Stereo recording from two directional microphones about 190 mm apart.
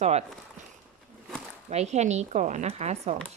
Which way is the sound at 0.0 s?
35° right (ahead or behind).